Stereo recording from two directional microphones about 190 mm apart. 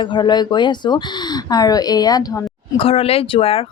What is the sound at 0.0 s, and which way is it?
Speech, 25° left (ahead or behind).